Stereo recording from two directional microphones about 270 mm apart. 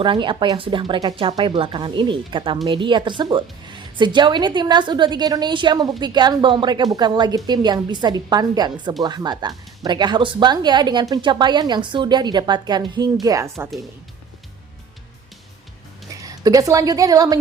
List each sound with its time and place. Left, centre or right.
0.0 s a woman's voice: centre
16.2 s a woman's voice: centre